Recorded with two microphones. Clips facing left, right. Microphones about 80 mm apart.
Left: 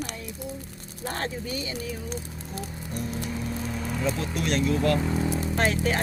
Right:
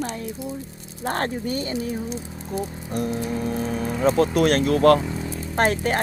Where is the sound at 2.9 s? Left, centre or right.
Right.